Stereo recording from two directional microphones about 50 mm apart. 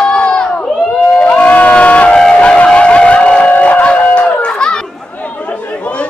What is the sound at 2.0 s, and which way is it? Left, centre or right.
Train, centre.